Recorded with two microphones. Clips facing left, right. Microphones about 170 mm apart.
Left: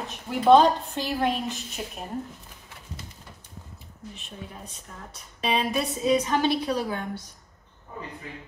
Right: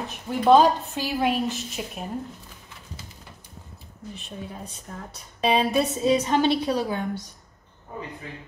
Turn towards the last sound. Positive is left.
turn(degrees=-25)  # may be behind; listen again after turning